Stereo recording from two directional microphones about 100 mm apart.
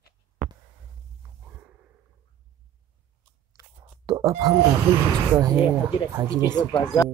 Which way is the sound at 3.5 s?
40° right (ahead or behind).